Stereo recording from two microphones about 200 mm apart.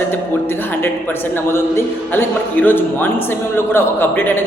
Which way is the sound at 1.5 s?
10° left (ahead or behind).